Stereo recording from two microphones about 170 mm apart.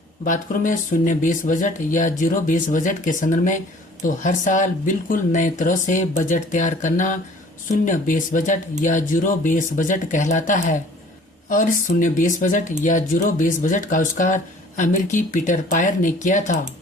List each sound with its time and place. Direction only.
0.3 s speech: 50° left (ahead or behind)